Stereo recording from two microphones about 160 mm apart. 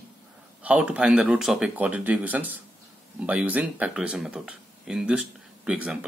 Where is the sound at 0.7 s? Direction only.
10° right (ahead or behind).